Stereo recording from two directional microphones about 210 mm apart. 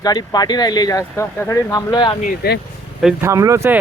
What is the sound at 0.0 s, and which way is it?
Speech, 20° left (ahead or behind).